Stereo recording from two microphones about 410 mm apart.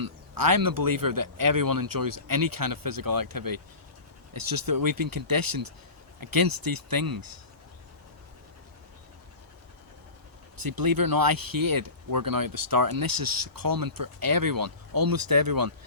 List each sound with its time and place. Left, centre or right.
0.0 s speech: right
10.6 s speech: right